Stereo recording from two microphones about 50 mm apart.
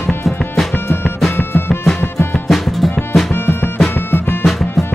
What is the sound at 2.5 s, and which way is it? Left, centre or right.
Music, centre.